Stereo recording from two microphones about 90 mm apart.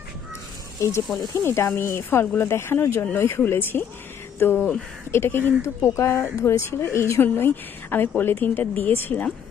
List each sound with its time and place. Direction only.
0.8 s speech: 35° left (ahead or behind); by 9.3 s 20° left (ahead or behind)